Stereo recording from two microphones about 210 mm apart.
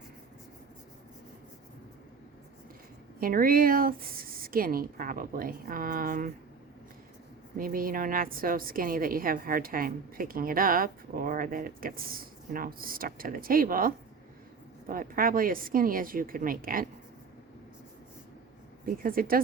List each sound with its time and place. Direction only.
3.2 s a woman's voice: 45° right (ahead or behind)
7.5 s a woman's voice: 40° right (ahead or behind)
18.9 s a woman's voice: 45° right (ahead or behind)